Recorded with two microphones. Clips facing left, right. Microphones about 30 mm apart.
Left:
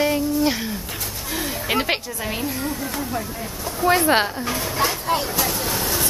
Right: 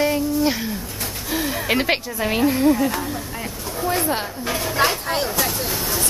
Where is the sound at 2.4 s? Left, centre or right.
Right.